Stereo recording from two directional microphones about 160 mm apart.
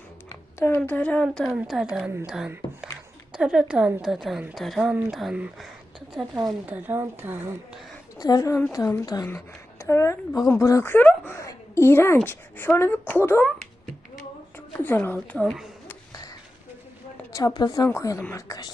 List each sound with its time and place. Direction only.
0.3 s a sound: 15° left (ahead or behind)
0.8 s a woman's voice: 10° left (ahead or behind); by 7.5 s 15° right (ahead or behind)
8.2 s a woman's voice: 25° left (ahead or behind)
14.8 s a woman's voice: 10° left (ahead or behind)
17.3 s speech: 25° left (ahead or behind)